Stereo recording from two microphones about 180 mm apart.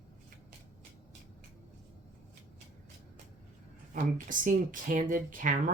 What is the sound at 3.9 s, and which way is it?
Speech, 45° right (ahead or behind).